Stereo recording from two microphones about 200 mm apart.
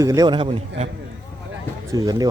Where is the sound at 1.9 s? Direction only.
15° right (ahead or behind).